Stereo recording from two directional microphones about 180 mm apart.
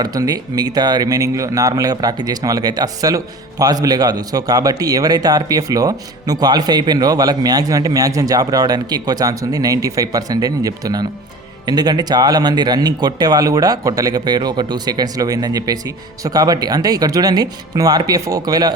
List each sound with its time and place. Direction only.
0.0 s speech: 20° right (ahead or behind)